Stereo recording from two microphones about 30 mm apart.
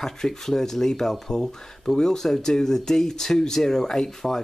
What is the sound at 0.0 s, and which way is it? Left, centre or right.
Speech, centre.